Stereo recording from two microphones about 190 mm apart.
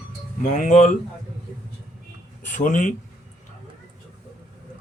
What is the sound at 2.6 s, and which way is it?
Speech, 40° left (ahead or behind).